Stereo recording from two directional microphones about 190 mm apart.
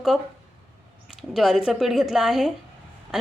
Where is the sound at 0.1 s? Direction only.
Centre (ahead or behind).